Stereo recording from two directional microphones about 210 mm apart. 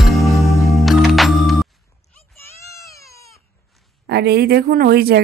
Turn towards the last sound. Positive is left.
turn(degrees=-50)  # may be behind; listen again after turning